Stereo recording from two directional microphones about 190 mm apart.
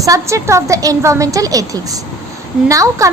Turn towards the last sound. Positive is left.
turn(degrees=-15)  # may be behind; listen again after turning